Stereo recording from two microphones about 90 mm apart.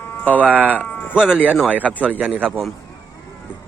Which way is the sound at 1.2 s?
15° right (ahead or behind).